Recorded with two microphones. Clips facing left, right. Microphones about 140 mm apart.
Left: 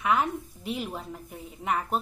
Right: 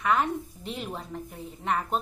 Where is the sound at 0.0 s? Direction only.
5° left (ahead or behind).